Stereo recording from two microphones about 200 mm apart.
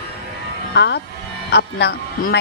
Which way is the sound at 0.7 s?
60° left (ahead or behind).